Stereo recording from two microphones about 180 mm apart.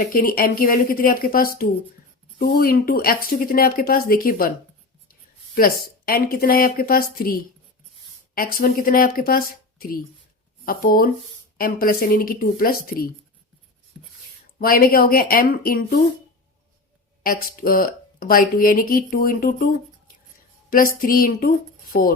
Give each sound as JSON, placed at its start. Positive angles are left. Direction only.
{"t": 0.1, "sound": "speech", "side_deg": 50}
{"t": 5.5, "sound": "speech", "side_deg": 55}
{"t": 14.0, "sound": "a sound", "side_deg": -5}
{"t": 14.6, "sound": "speech", "side_deg": 55}
{"t": 17.2, "sound": "a woman's voice", "side_deg": 55}